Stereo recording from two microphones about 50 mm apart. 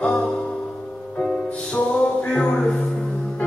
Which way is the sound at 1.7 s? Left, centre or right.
Left.